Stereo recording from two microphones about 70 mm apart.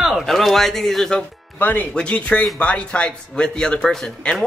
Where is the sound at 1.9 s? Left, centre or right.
Centre.